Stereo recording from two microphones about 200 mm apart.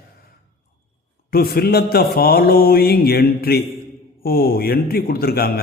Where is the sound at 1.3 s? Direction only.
50° left (ahead or behind).